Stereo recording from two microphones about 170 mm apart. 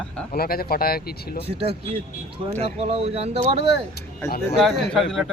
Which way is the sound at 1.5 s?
35° right (ahead or behind).